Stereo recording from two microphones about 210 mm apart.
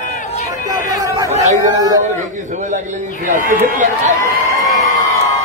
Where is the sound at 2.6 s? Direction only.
35° right (ahead or behind).